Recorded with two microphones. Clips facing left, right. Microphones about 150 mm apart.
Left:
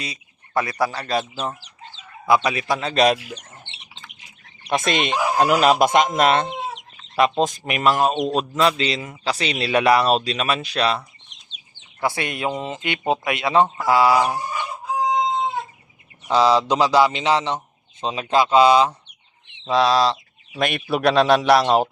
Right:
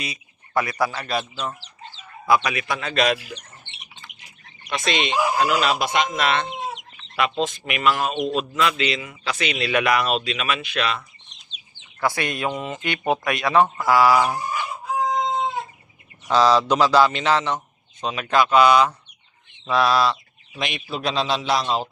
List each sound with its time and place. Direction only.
0.0 s a man's voice: 30° left (ahead or behind)
4.7 s a man's voice: 45° left (ahead or behind)
11.9 s speech: 25° left (ahead or behind)
16.2 s a man's voice: 20° left (ahead or behind)
20.6 s a man's voice: 55° left (ahead or behind)